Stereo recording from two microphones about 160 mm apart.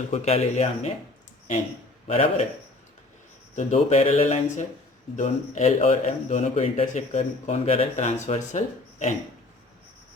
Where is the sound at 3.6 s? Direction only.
45° left (ahead or behind).